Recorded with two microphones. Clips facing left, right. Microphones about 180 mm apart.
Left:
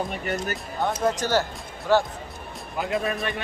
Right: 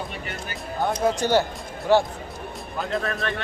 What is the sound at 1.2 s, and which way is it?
Speech, 15° right (ahead or behind).